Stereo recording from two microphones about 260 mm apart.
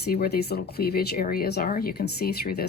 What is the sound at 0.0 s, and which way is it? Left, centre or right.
Speech, left.